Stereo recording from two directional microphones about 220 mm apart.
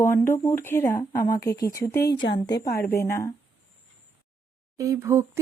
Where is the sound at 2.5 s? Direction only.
45° left (ahead or behind).